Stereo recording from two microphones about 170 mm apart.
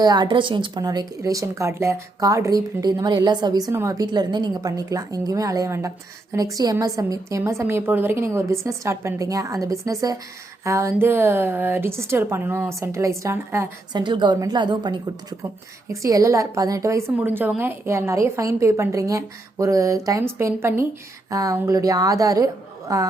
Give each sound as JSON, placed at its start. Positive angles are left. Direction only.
{"t": 0.0, "sound": "a woman's voice", "side_deg": -25}
{"t": 13.9, "sound": "a woman's voice", "side_deg": -25}